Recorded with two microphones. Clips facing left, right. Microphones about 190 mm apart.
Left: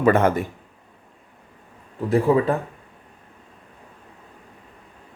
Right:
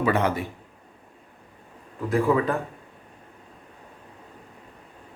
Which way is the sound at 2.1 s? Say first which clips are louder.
Left 4 dB; 35° left (ahead or behind).